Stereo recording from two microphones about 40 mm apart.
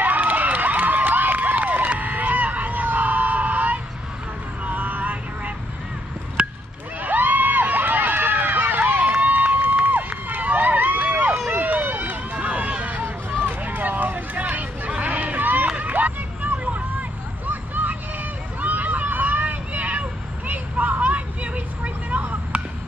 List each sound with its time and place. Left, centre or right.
0.0 s crowd: right
4.6 s vehicle: right
6.4 s honk: right
7.0 s a sound: right
9.1 s run: right
13.0 s hubbub: right
15.9 s vehicle: right
17.5 s a sound: right
18.6 s hubbub: right